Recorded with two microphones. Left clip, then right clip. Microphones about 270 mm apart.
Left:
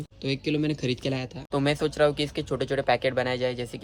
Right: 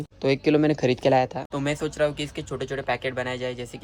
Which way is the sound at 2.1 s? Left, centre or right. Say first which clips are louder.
Left 3 dB; centre.